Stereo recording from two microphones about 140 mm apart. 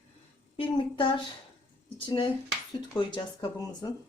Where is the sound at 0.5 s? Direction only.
40° left (ahead or behind).